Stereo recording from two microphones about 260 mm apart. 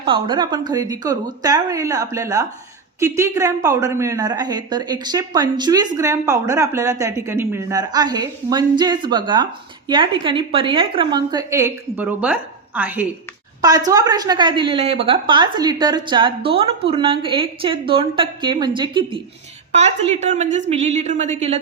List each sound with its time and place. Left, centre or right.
0.0 s a woman's voice: centre